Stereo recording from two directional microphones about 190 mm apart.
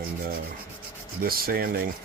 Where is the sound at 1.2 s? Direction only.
50° right (ahead or behind).